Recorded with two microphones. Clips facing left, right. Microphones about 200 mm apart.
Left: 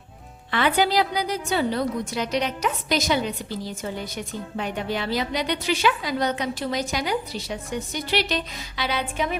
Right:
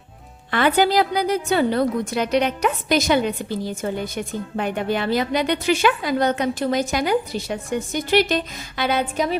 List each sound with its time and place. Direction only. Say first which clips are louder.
0.5 s a woman's voice: right 4 dB; 50° right (ahead or behind)